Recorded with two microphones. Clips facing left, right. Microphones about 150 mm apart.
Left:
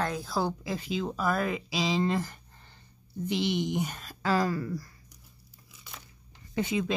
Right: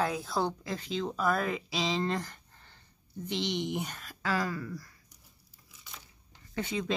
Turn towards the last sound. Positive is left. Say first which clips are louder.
# left 5 dB
turn(degrees=10)  # may be behind; listen again after turning